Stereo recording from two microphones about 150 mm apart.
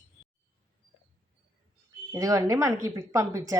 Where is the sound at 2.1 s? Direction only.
20° right (ahead or behind).